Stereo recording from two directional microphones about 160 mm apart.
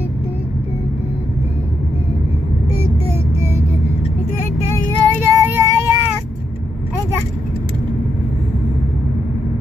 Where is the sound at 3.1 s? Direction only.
15° right (ahead or behind).